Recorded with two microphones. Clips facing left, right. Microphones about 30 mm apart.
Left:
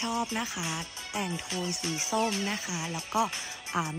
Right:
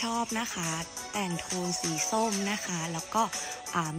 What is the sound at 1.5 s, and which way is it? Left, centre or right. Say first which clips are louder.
Speech: even; left.